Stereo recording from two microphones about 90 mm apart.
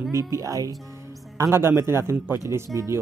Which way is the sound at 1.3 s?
30° right (ahead or behind).